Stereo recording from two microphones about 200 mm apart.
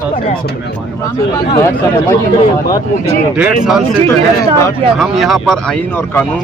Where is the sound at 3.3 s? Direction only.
5° right (ahead or behind).